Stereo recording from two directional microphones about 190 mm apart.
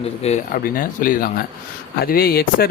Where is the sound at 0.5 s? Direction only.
45° left (ahead or behind).